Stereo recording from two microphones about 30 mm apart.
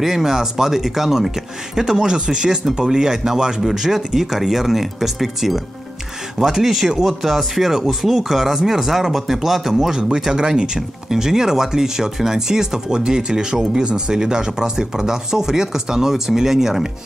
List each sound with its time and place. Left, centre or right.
0.0 s speech: centre
6.6 s speech: centre